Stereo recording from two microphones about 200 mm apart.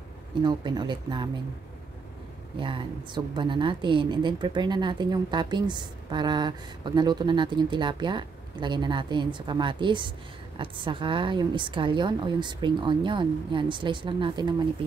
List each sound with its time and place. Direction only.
0.4 s a woman's voice: 20° right (ahead or behind)
2.6 s a woman's voice: 25° right (ahead or behind)